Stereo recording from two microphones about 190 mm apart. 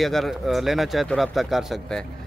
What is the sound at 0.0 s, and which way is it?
A man's voice, centre (ahead or behind).